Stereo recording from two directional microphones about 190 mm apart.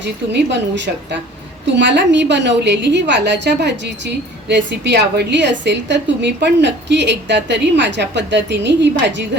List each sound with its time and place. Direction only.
0.0 s a woman's voice: 70° right (ahead or behind)